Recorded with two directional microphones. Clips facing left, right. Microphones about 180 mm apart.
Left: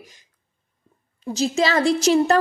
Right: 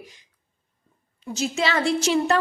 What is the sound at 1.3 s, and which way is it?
A woman's voice, 35° left (ahead or behind).